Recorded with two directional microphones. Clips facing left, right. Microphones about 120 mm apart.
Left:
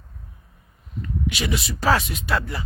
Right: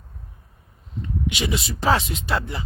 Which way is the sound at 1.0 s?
25° right (ahead or behind).